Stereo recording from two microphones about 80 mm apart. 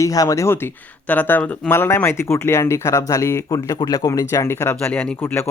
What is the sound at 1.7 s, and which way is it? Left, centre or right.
Speech, left.